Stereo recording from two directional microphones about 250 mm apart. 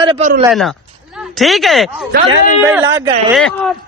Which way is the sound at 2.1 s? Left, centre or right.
Right.